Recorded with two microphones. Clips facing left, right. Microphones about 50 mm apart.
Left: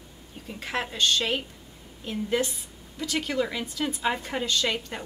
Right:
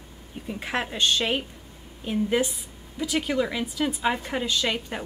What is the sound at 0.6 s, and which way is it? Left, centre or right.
A woman's voice, centre.